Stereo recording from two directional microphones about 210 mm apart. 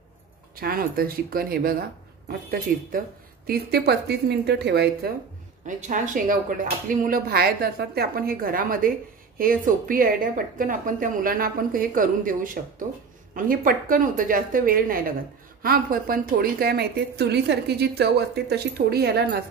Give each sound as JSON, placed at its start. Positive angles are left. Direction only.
{"t": 0.6, "sound": "a woman's voice", "side_deg": -45}
{"t": 3.4, "sound": "a woman's voice", "side_deg": -50}
{"t": 5.7, "sound": "a woman's voice", "side_deg": -35}